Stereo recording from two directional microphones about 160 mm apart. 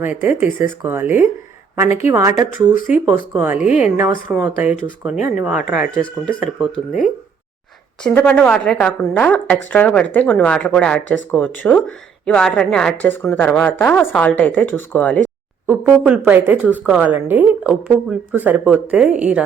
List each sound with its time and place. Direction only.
0.0 s speech: 15° right (ahead or behind)
2.7 s speech: 55° left (ahead or behind)
3.1 s speech: 10° right (ahead or behind)
3.7 s speech: 50° left (ahead or behind)
3.9 s speech: 10° right (ahead or behind)
5.8 s speech: 55° left (ahead or behind)
8.1 s a woman's voice: 10° left (ahead or behind)
15.6 s speech: 10° right (ahead or behind)